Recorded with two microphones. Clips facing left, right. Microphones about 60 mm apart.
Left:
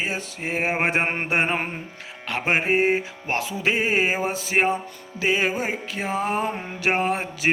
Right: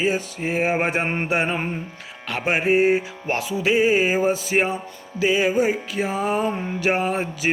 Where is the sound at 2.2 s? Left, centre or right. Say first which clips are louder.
Right 1 dB; left.